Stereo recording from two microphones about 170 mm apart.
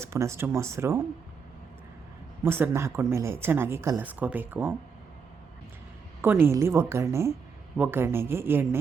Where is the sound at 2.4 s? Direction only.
15° right (ahead or behind).